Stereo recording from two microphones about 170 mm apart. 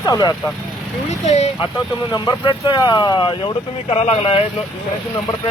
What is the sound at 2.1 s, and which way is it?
Speech, 25° left (ahead or behind).